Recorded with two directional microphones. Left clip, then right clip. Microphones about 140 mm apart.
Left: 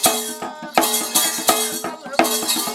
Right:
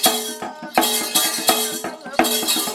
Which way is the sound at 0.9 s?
5° left (ahead or behind).